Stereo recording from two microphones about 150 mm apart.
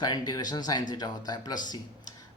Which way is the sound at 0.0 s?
25° left (ahead or behind).